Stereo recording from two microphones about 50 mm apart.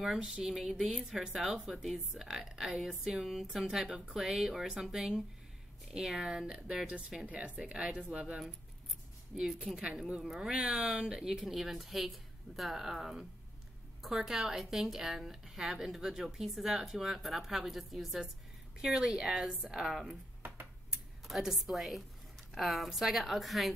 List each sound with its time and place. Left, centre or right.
0.0 s a woman's voice: centre
9.3 s a woman's voice: centre